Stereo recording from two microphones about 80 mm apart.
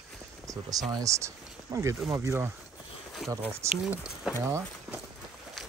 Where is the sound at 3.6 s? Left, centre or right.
Right.